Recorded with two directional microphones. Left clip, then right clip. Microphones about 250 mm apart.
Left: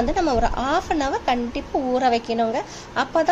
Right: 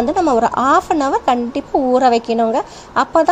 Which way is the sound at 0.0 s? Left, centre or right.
Right.